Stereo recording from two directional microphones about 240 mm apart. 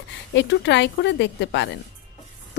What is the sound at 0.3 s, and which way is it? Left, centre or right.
Speech, left.